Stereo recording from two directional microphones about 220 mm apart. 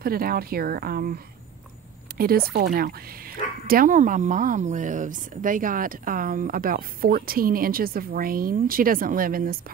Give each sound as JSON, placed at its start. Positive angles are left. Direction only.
{"t": 0.0, "sound": "speech", "side_deg": -45}